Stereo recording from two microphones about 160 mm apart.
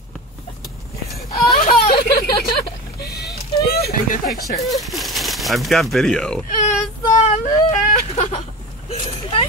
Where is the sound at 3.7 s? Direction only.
70° left (ahead or behind).